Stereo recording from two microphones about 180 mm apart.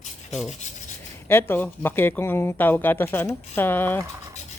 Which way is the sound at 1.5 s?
10° left (ahead or behind).